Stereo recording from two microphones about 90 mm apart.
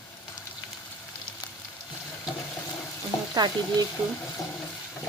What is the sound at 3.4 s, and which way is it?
Stir, 50° right (ahead or behind).